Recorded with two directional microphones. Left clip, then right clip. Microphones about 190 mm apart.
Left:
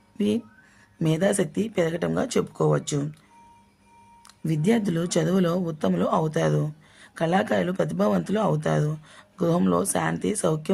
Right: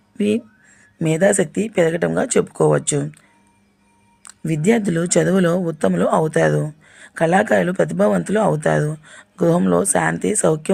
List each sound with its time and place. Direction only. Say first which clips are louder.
0.2 s speech: right 6 dB; 20° right (ahead or behind)
4.4 s speech: right 6 dB; 20° right (ahead or behind)